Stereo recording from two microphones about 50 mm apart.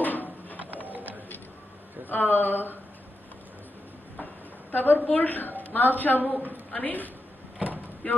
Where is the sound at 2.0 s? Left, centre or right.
Left.